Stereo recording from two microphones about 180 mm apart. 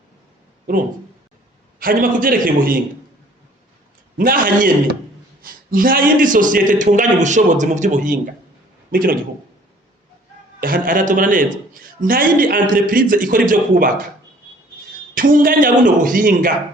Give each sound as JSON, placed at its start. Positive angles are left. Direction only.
{"t": 1.8, "sound": "a man's voice", "side_deg": -50}
{"t": 4.2, "sound": "a man's voice", "side_deg": -50}
{"t": 10.6, "sound": "a man's voice", "side_deg": -50}
{"t": 15.1, "sound": "a man's voice", "side_deg": -50}